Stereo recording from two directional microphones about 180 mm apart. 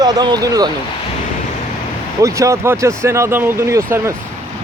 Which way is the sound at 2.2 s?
15° right (ahead or behind).